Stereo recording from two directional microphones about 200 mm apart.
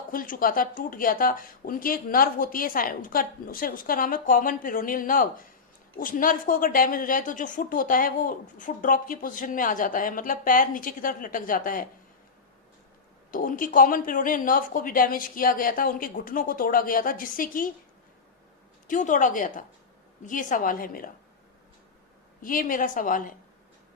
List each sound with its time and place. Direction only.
0.1 s a woman's voice: 45° left (ahead or behind)
13.3 s a woman's voice: 45° left (ahead or behind)
18.9 s a woman's voice: 40° left (ahead or behind)
22.4 s a woman's voice: 45° left (ahead or behind)